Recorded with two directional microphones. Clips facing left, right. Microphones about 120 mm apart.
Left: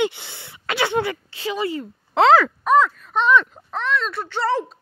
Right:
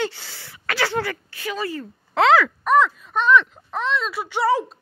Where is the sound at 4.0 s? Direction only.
5° right (ahead or behind).